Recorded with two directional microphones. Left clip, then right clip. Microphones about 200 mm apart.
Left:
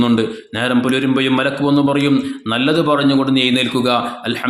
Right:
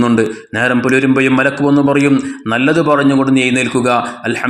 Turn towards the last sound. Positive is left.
turn(degrees=-10)  # may be behind; listen again after turning